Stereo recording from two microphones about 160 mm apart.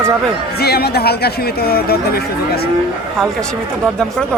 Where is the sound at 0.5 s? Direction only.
80° left.